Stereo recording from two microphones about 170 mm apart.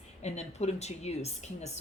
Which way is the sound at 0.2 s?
40° left (ahead or behind).